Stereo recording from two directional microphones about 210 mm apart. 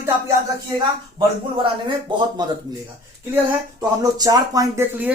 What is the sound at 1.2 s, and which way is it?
Speech, 20° right (ahead or behind).